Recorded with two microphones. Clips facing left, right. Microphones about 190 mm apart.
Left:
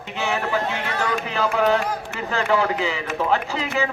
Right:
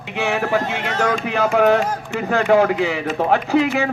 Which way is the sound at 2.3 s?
55° right (ahead or behind).